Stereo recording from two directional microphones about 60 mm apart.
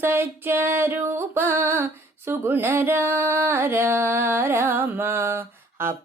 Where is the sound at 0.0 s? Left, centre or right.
Right.